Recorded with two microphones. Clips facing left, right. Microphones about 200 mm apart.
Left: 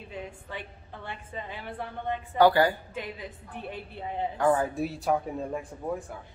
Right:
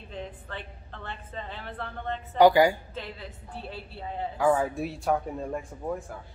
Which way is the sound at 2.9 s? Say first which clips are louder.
Left 2 dB; 15° left (ahead or behind).